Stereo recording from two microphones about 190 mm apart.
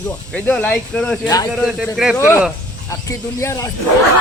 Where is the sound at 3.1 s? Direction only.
15° left (ahead or behind).